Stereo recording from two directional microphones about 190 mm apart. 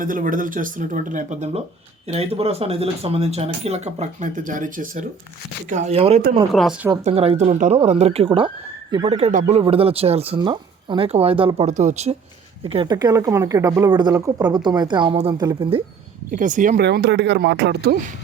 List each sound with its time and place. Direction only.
0.0 s speech: 45° right (ahead or behind)
6.5 s a woman's voice: centre (ahead or behind)
7.0 s speech: 30° right (ahead or behind)
12.6 s a woman's voice: 25° right (ahead or behind)
16.3 s speech: 40° right (ahead or behind)
16.7 s speech: 60° right (ahead or behind)